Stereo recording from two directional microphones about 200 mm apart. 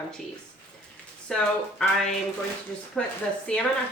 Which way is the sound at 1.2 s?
5° left (ahead or behind).